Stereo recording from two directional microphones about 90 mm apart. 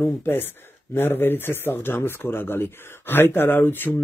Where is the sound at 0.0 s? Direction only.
25° left (ahead or behind).